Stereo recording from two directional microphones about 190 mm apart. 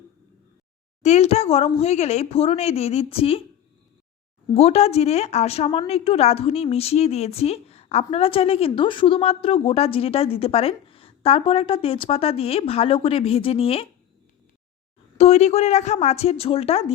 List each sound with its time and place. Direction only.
1.0 s a woman's voice: 35° left (ahead or behind)
4.5 s a woman's voice: 35° left (ahead or behind)
15.2 s a woman's voice: 35° left (ahead or behind)